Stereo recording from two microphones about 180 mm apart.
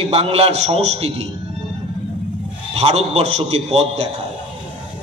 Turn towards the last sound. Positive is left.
turn(degrees=-35)  # may be behind; listen again after turning